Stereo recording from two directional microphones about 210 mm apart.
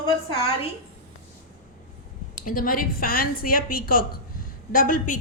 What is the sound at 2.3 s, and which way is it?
A woman's voice, 40° left (ahead or behind).